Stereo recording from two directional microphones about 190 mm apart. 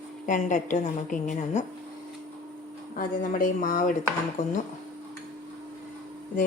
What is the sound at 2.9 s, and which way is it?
A woman's voice, 45° left (ahead or behind).